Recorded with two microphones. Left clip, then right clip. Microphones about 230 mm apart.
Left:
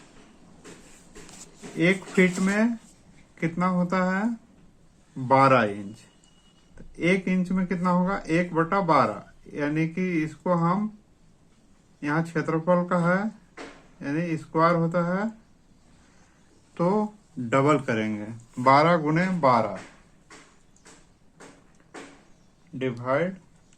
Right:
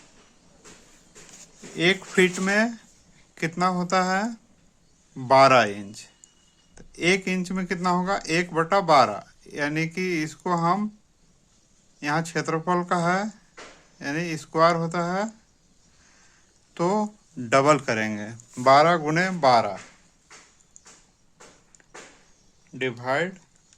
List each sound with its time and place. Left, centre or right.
1.8 s speech: right
11.9 s speech: right
16.7 s speech: right
17.5 s speech: right
18.5 s speech: right
22.8 s speech: right